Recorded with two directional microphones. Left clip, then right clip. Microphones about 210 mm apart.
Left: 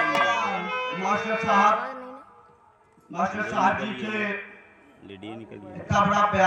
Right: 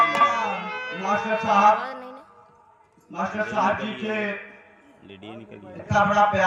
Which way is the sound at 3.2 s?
40° left (ahead or behind).